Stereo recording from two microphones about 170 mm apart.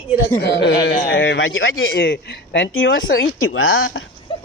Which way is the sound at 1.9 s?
75° left (ahead or behind).